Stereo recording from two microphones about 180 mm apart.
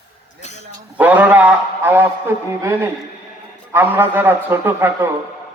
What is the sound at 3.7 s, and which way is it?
A man's voice, 10° right (ahead or behind).